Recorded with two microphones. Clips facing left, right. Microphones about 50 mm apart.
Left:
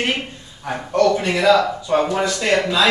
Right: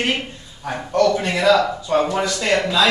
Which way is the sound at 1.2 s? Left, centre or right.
Centre.